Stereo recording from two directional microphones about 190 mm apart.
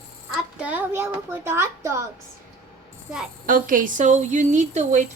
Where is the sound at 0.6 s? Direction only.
10° right (ahead or behind).